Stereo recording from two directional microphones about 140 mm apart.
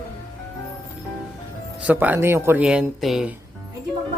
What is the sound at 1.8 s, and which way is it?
Speech, 10° right (ahead or behind).